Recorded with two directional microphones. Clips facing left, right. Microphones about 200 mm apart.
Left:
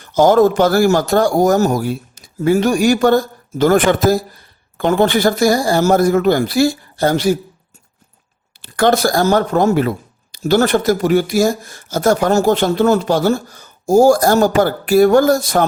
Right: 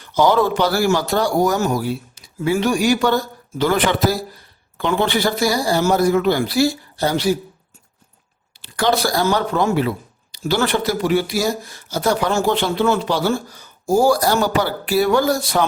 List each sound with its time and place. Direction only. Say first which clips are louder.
0.0 s speech: left 5 dB; 45° left (ahead or behind)
8.6 s speech: left 5 dB; 50° left (ahead or behind)